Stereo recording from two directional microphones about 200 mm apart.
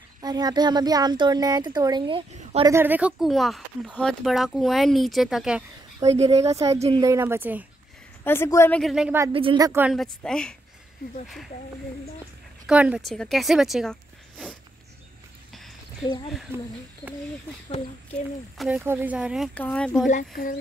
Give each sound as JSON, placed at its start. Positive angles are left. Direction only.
{"t": 0.2, "sound": "speech", "side_deg": -20}
{"t": 2.7, "sound": "speech", "side_deg": -10}
{"t": 6.0, "sound": "a woman's voice", "side_deg": -15}
{"t": 8.2, "sound": "a woman's voice", "side_deg": 10}
{"t": 9.3, "sound": "speech", "side_deg": -25}
{"t": 9.7, "sound": "a woman's voice", "side_deg": -10}
{"t": 9.9, "sound": "speech", "side_deg": 5}
{"t": 12.6, "sound": "speech", "side_deg": -5}
{"t": 18.8, "sound": "speech", "side_deg": -10}
{"t": 20.1, "sound": "speech", "side_deg": 40}